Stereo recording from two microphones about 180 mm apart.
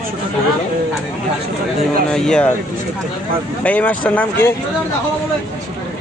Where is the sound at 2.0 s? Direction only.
5° left (ahead or behind).